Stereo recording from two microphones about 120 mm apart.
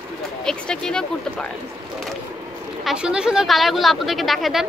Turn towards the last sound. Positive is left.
turn(degrees=0)  # may be behind; listen again after turning